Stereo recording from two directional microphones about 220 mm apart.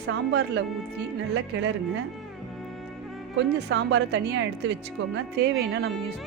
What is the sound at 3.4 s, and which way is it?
Speech, 50° right (ahead or behind).